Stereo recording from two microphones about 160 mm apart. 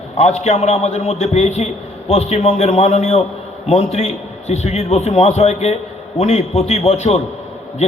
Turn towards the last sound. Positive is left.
turn(degrees=40)  # may be behind; listen again after turning